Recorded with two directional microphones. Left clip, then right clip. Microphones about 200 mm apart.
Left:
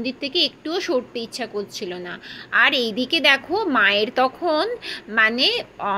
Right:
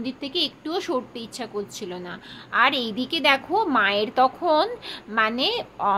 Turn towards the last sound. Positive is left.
turn(degrees=0)  # may be behind; listen again after turning